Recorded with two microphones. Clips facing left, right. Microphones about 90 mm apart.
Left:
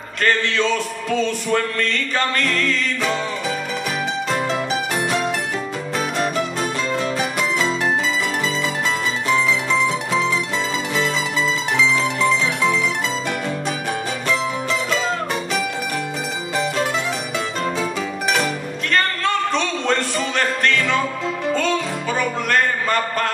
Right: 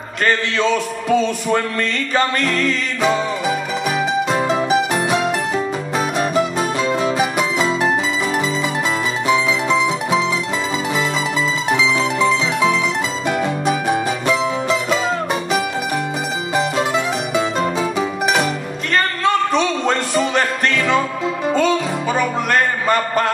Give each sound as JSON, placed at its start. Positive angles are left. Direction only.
{"t": 0.2, "sound": "speech", "side_deg": -15}
{"t": 4.6, "sound": "music", "side_deg": -20}
{"t": 9.3, "sound": "mandolin", "side_deg": -10}
{"t": 11.7, "sound": "mandolin", "side_deg": -10}
{"t": 13.7, "sound": "music", "side_deg": -10}
{"t": 16.5, "sound": "mandolin", "side_deg": -15}
{"t": 17.6, "sound": "music", "side_deg": -15}